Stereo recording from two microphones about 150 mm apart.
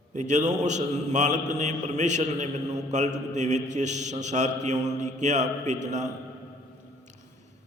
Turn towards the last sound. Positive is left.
turn(degrees=-50)  # may be behind; listen again after turning